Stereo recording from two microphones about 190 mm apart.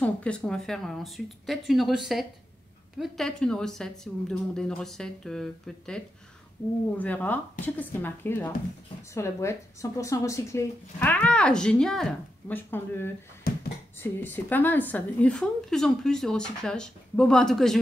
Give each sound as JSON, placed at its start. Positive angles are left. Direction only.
{"t": 0.0, "sound": "speech", "side_deg": 5}
{"t": 13.5, "sound": "a sound", "side_deg": 50}
{"t": 13.9, "sound": "speech", "side_deg": 10}